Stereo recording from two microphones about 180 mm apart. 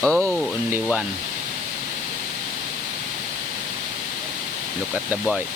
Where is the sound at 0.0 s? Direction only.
5° left (ahead or behind).